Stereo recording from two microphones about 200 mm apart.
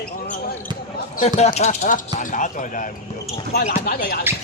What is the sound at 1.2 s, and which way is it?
Speech, 35° left (ahead or behind).